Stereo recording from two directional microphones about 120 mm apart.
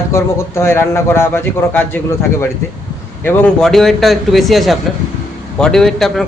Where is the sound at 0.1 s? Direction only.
20° left (ahead or behind).